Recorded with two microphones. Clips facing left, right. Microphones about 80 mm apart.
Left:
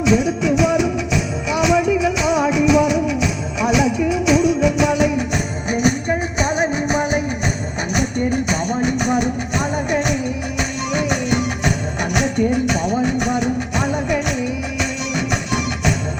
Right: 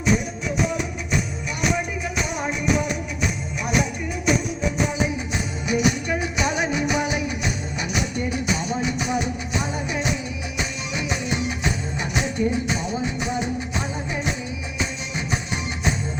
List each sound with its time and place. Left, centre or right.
0.0 s music: left
5.6 s music: left
10.9 s music: left